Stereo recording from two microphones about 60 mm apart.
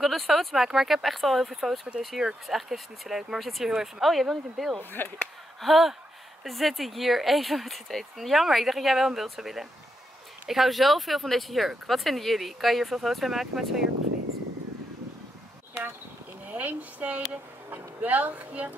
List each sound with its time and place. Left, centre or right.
0.0 s speech: centre
5.0 s speech: left
5.6 s speech: centre
16.4 s speech: right